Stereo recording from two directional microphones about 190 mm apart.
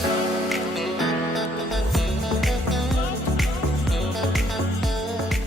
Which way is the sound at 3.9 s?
Centre (ahead or behind).